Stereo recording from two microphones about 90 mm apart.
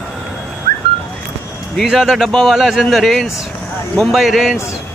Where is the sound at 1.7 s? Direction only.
Centre (ahead or behind).